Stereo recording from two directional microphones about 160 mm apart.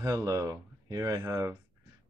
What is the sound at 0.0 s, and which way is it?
Speech, 20° right (ahead or behind).